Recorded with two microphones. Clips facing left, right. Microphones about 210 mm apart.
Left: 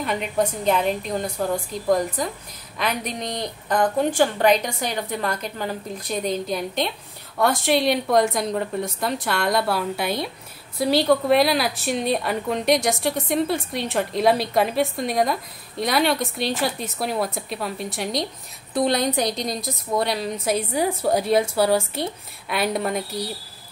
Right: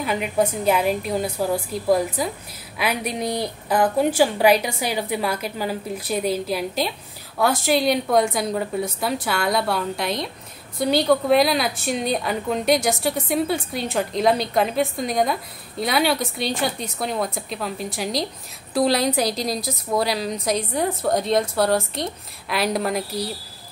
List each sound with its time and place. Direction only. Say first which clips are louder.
0.0 s a woman's voice: right 2 dB; 5° right (ahead or behind)